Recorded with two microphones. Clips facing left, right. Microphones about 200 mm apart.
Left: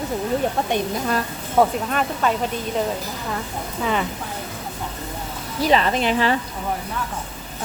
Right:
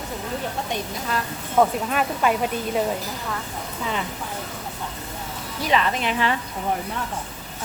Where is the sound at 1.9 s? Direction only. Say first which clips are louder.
Even; 5° right (ahead or behind).